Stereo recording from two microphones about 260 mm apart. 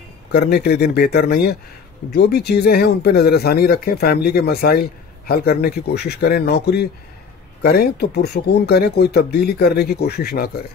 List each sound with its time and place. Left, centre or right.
0.3 s speech: left